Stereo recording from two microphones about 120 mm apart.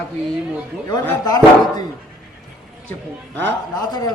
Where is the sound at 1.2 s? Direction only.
35° left (ahead or behind).